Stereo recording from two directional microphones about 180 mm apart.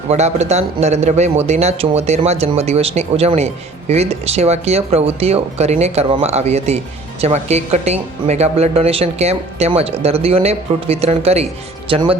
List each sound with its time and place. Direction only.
0.1 s speech: 40° right (ahead or behind)